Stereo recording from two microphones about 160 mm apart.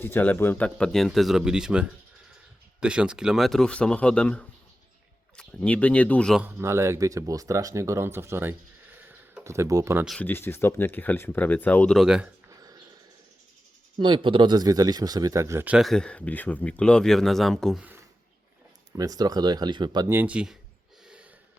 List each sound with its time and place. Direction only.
0.0 s speech: 10° left (ahead or behind)
6.4 s speech: 15° right (ahead or behind)
9.0 s a sound: 10° right (ahead or behind)
10.1 s speech: 10° left (ahead or behind)
14.0 s speech: 30° right (ahead or behind); by 17.8 s centre (ahead or behind)
18.9 s speech: 25° right (ahead or behind)
20.1 s speech: 10° right (ahead or behind)